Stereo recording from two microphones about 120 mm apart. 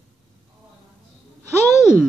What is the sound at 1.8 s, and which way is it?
Speech, 5° right (ahead or behind).